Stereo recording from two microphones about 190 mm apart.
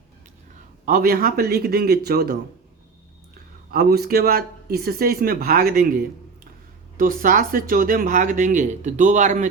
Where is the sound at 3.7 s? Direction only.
55° right (ahead or behind).